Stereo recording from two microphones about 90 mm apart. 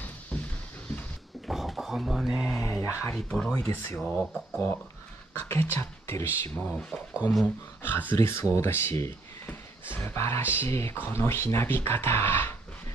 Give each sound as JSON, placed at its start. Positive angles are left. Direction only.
{"t": 0.3, "sound": "a sound", "side_deg": 15}
{"t": 1.5, "sound": "speech", "side_deg": 0}
{"t": 2.8, "sound": "speech", "side_deg": 30}
{"t": 3.1, "sound": "speech", "side_deg": 10}
{"t": 4.0, "sound": "speech", "side_deg": 5}
{"t": 5.5, "sound": "speech", "side_deg": 25}
{"t": 6.6, "sound": "speech", "side_deg": 15}
{"t": 8.2, "sound": "speech", "side_deg": 30}